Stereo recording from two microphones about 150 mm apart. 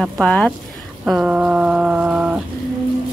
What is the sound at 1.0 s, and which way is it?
Speech, 5° right (ahead or behind).